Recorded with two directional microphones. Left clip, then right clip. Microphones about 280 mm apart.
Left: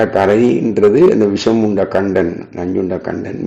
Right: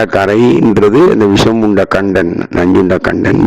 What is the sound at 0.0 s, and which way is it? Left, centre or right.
A man's voice, right.